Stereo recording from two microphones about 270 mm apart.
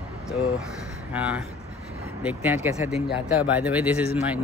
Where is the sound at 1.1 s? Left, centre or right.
Centre.